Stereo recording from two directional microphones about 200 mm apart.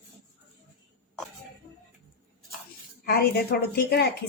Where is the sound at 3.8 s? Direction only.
55° left (ahead or behind).